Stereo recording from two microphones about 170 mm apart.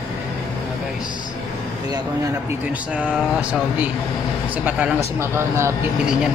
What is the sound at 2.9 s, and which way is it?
Speech, 5° right (ahead or behind).